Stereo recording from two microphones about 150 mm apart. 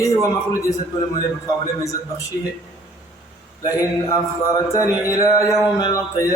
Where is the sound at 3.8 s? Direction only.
25° left (ahead or behind).